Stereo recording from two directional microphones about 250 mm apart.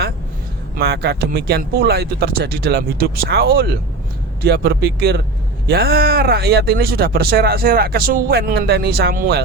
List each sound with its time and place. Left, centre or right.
0.8 s speech: right